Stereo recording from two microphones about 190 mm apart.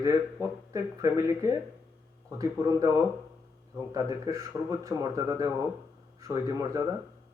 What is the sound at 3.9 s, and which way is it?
Speech, 15° right (ahead or behind).